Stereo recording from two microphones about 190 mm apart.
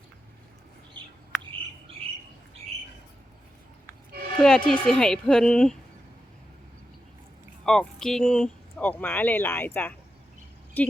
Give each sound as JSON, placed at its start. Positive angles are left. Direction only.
{"t": 2.0, "sound": "squawk", "side_deg": -30}
{"t": 4.4, "sound": "speech", "side_deg": 0}
{"t": 7.6, "sound": "speech", "side_deg": 5}